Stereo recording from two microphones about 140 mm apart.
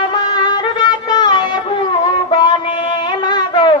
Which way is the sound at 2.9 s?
30° left (ahead or behind).